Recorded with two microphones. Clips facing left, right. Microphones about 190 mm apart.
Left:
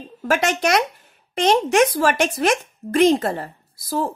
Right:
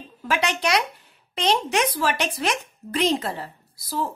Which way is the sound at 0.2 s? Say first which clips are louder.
Left 5 dB; 45° left (ahead or behind).